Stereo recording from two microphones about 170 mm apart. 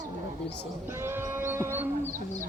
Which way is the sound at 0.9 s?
15° right (ahead or behind).